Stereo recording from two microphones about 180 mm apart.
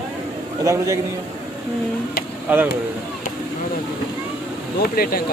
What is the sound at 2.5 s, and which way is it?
Speech, 10° right (ahead or behind).